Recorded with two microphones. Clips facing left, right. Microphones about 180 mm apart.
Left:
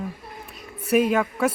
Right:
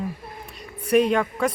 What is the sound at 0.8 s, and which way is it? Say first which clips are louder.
Speech: right 1 dB; 5° left (ahead or behind).